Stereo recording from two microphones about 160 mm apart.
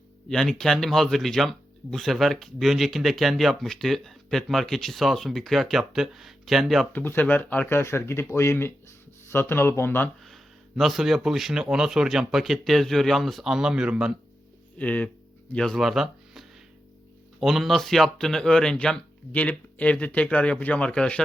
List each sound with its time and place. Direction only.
0.3 s speech: 5° left (ahead or behind)
6.9 s speech: 15° left (ahead or behind)
10.2 s speech: centre (ahead or behind)
14.8 s speech: 10° left (ahead or behind)